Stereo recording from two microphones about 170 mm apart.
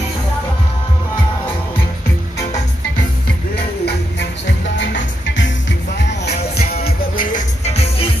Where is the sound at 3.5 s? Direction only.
80° left.